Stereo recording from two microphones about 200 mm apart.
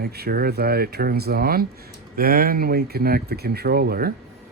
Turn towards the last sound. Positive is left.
turn(degrees=-50)  # may be behind; listen again after turning